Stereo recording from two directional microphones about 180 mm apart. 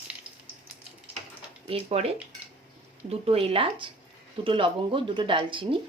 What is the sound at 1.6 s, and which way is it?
Speech, 35° right (ahead or behind).